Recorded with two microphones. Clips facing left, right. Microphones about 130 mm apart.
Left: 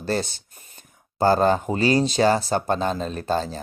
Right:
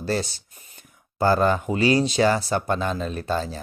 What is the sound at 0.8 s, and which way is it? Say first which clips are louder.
Speech: left 2 dB; 35° left (ahead or behind).